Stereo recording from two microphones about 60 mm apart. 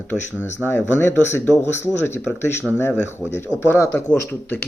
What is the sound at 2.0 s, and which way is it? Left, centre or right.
Speech, left.